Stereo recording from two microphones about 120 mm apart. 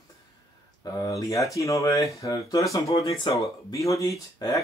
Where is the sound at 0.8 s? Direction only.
30° left (ahead or behind).